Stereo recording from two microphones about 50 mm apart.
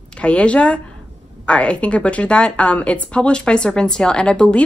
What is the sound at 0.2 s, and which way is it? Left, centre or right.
A woman's voice, left.